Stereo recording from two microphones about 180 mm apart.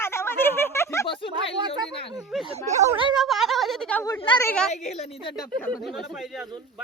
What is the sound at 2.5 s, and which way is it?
Speech, 35° right (ahead or behind).